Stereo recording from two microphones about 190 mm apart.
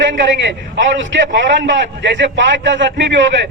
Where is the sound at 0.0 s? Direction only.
70° right (ahead or behind).